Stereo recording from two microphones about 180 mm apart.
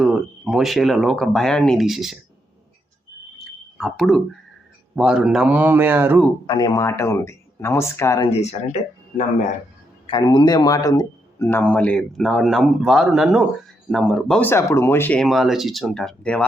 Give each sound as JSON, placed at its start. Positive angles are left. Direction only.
{"t": 0.0, "sound": "speech", "side_deg": 0}
{"t": 3.8, "sound": "speech", "side_deg": 0}
{"t": 6.5, "sound": "speech", "side_deg": 25}
{"t": 8.3, "sound": "speech", "side_deg": 35}
{"t": 10.1, "sound": "speech", "side_deg": 25}